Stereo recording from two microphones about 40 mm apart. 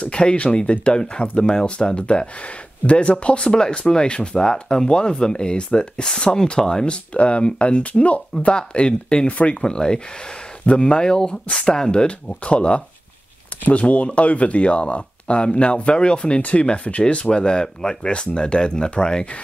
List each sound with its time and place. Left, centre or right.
0.0 s speech: left
7.2 s speech: left